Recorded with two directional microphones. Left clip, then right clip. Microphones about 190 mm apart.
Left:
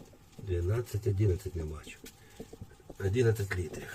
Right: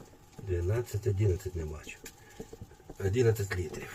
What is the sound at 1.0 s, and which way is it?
Speech, centre (ahead or behind).